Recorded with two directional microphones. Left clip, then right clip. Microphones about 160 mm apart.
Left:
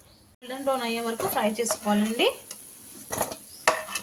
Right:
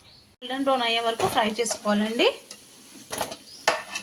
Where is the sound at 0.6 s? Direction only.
20° right (ahead or behind).